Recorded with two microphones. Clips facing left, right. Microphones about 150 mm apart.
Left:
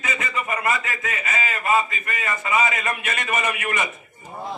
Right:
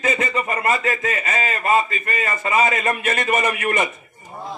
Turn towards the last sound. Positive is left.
turn(degrees=-35)  # may be behind; listen again after turning